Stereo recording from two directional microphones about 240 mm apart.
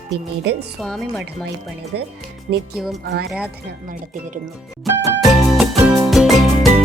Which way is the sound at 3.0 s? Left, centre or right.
Right.